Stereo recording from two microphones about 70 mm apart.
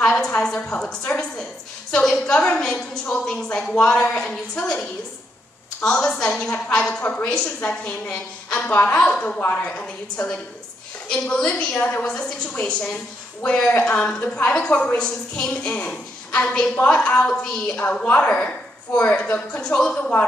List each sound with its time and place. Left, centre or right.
0.0 s a sound: centre
0.4 s a woman's voice: centre
9.4 s a woman's voice: left
18.0 s a woman's voice: left